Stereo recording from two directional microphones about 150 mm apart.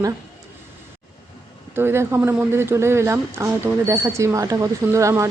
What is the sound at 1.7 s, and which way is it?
Speech, 15° right (ahead or behind).